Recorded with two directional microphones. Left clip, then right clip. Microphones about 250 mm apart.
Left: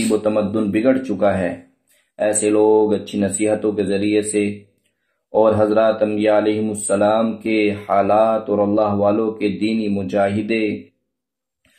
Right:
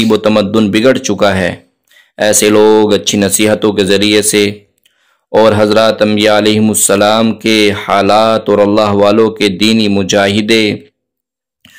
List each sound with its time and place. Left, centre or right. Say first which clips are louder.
0.2 s speech: right 9 dB; right